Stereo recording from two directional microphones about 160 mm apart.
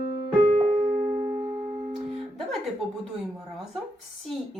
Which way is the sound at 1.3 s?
10° right (ahead or behind).